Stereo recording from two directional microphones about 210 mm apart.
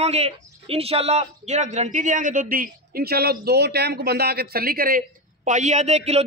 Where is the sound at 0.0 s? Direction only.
30° right (ahead or behind).